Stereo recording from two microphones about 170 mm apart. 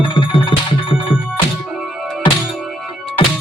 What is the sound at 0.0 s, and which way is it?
Music, 30° left (ahead or behind).